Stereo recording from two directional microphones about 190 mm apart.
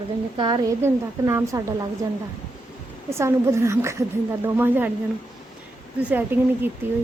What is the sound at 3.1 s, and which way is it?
A woman's voice, 15° right (ahead or behind).